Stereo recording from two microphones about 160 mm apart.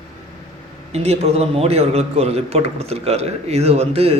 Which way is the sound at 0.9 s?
40° right (ahead or behind).